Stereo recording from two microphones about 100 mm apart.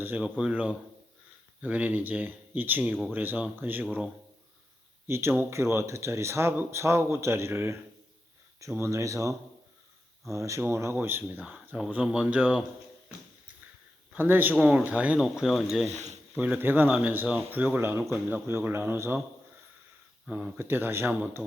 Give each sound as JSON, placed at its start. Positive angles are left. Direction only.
{"t": 0.0, "sound": "speech", "side_deg": -15}
{"t": 5.0, "sound": "speech", "side_deg": -25}
{"t": 14.1, "sound": "a man's voice", "side_deg": -20}
{"t": 15.2, "sound": "speech", "side_deg": -5}
{"t": 16.3, "sound": "speech", "side_deg": -15}
{"t": 20.2, "sound": "speech", "side_deg": -10}
{"t": 20.6, "sound": "speech", "side_deg": -20}